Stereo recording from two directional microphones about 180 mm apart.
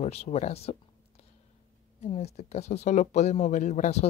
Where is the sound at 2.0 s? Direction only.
35° left (ahead or behind).